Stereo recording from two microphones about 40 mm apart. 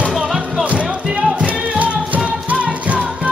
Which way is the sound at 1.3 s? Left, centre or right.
Right.